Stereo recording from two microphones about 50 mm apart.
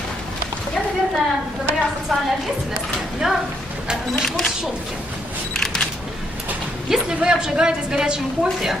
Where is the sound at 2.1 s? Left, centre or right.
Centre.